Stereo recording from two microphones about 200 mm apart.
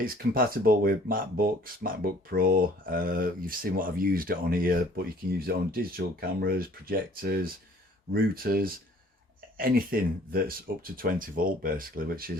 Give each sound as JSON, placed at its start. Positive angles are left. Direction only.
{"t": 0.0, "sound": "speech", "side_deg": -45}